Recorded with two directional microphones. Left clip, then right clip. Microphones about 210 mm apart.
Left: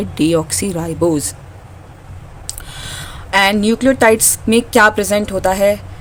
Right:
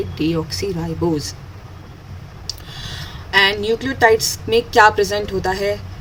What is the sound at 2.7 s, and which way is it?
A woman's voice, 55° left (ahead or behind).